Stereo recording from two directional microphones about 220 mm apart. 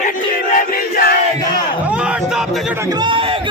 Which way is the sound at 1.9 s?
5° right (ahead or behind).